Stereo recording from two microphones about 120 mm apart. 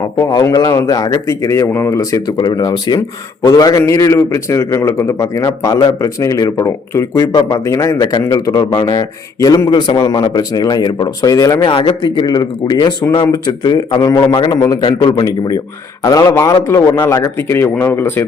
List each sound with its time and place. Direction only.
0.2 s a man's voice: 35° left (ahead or behind)
11.6 s a man's voice: 45° left (ahead or behind)
14.5 s a man's voice: 30° left (ahead or behind)